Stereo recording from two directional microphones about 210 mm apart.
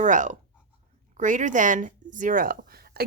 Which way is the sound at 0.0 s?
35° right (ahead or behind).